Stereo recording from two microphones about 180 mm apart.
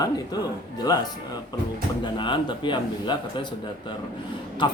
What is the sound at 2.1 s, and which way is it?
Speech, 25° left (ahead or behind).